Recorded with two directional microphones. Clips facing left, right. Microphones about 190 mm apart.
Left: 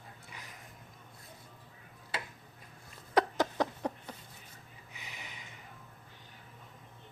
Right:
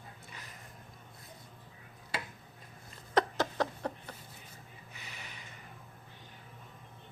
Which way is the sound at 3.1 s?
10° left (ahead or behind).